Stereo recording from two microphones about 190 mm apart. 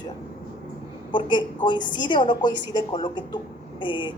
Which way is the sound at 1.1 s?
25° left (ahead or behind).